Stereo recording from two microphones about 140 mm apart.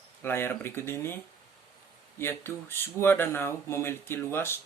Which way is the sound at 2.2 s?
15° left (ahead or behind).